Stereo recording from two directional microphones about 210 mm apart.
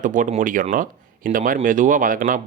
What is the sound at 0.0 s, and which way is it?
Speech, 35° right (ahead or behind).